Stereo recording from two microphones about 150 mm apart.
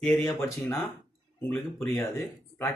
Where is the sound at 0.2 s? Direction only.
15° left (ahead or behind).